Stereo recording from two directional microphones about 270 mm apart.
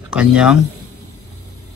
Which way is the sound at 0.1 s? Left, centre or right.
Centre.